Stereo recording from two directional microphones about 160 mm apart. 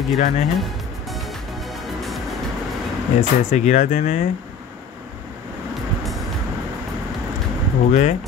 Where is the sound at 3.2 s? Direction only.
45° left (ahead or behind).